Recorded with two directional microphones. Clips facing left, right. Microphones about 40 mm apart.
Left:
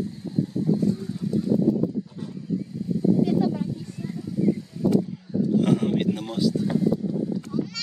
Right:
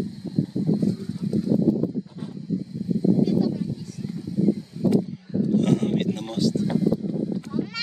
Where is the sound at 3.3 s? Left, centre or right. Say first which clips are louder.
Even; left.